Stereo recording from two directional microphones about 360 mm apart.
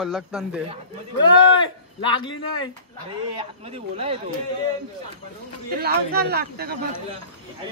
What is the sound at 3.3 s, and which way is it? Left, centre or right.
Speech, centre.